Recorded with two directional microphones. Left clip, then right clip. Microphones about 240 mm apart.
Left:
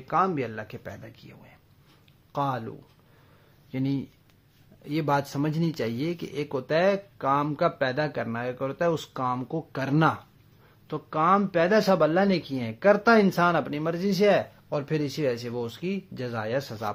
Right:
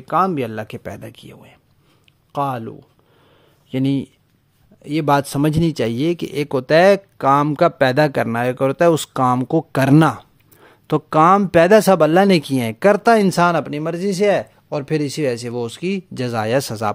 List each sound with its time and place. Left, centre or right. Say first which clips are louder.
0.0 s speech: right 7 dB; right
3.7 s speech: right 10 dB; right